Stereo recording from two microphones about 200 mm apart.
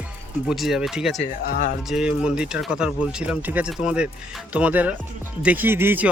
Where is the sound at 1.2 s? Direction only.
45° left (ahead or behind).